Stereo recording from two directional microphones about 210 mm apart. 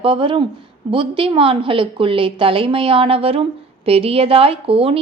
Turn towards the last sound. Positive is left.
turn(degrees=-25)  # may be behind; listen again after turning